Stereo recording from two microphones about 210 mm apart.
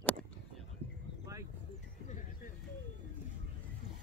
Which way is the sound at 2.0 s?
35° left (ahead or behind).